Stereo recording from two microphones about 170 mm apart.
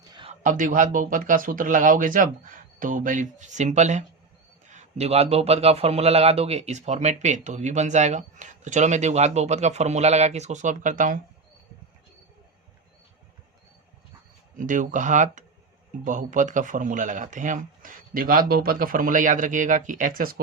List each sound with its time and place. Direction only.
0.1 s a sound: 30° right (ahead or behind)
0.4 s a man's voice: 50° right (ahead or behind)
14.5 s speech: 50° right (ahead or behind)